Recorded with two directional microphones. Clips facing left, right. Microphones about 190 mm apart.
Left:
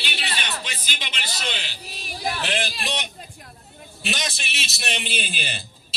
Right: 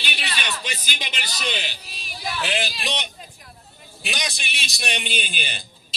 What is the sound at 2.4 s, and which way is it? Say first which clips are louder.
Speech: right 3 dB; 5° right (ahead or behind).